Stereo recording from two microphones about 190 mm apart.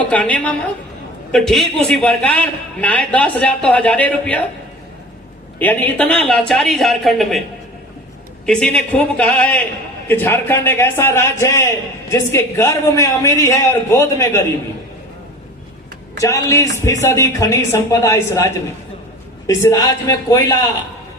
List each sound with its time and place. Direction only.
0.1 s a man's voice: 5° left (ahead or behind)
5.5 s a man's voice: 10° left (ahead or behind)
8.4 s a man's voice: 5° left (ahead or behind)
16.1 s a man's voice: 15° left (ahead or behind)
19.5 s a man's voice: 15° left (ahead or behind)